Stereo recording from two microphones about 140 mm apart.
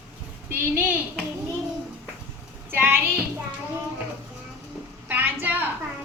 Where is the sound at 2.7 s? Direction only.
15° right (ahead or behind).